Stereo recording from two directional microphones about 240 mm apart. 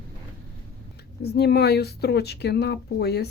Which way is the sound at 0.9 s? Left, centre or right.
Left.